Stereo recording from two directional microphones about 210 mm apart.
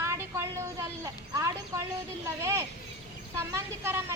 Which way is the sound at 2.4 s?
10° right (ahead or behind).